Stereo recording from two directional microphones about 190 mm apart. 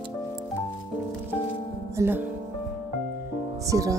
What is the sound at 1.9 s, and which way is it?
Speech, 10° right (ahead or behind).